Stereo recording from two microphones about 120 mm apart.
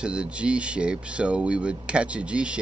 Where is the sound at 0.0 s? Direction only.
10° right (ahead or behind).